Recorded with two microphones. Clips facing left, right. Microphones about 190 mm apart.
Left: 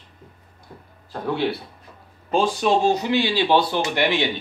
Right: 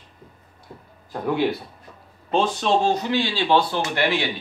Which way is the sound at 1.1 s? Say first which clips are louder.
Right 1 dB; 15° right (ahead or behind).